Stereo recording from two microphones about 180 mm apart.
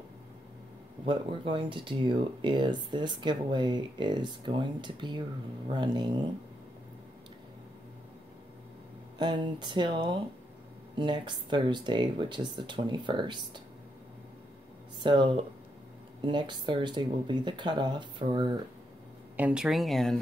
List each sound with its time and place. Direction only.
1.0 s speech: 30° right (ahead or behind)
9.2 s speech: 25° right (ahead or behind)
15.0 s speech: 25° right (ahead or behind)
19.3 s speech: 5° right (ahead or behind)